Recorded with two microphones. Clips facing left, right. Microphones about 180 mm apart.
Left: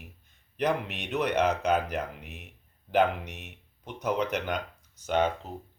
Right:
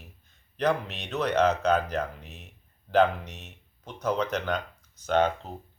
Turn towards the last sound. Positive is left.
turn(degrees=10)  # may be behind; listen again after turning